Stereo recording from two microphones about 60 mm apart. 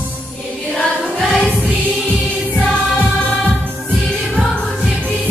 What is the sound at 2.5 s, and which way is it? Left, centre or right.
Music, centre.